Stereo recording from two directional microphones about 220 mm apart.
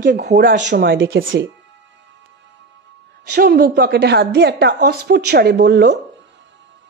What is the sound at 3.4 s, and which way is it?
A woman's voice, 45° right (ahead or behind).